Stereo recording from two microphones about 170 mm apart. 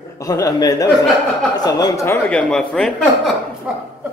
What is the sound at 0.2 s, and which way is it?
Speech, 20° left (ahead or behind).